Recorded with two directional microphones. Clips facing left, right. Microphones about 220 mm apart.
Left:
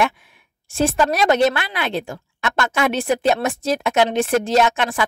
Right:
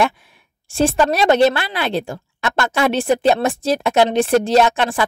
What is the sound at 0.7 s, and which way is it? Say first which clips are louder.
A woman's voice: right 2 dB; 30° right (ahead or behind).